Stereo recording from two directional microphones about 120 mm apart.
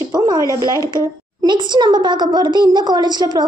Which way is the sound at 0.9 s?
40° right (ahead or behind).